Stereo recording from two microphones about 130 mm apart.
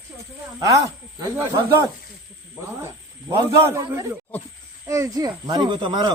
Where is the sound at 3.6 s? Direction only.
20° right (ahead or behind); by 6.1 s 35° right (ahead or behind).